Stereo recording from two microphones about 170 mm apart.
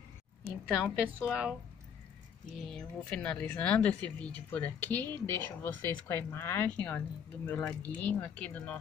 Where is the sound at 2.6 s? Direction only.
5° left (ahead or behind).